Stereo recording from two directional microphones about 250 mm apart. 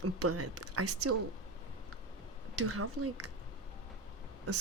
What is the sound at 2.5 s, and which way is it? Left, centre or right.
Speech, right.